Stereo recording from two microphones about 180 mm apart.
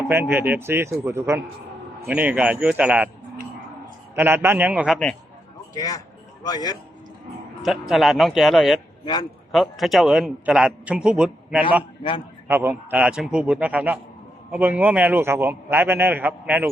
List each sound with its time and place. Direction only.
0.1 s a man's voice: 10° right (ahead or behind)
4.1 s a man's voice: 10° right (ahead or behind)
5.7 s a man's voice: 20° left (ahead or behind)
7.6 s a man's voice: centre (ahead or behind)